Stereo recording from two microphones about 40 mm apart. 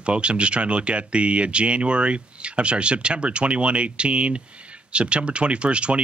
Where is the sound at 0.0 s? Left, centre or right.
Right.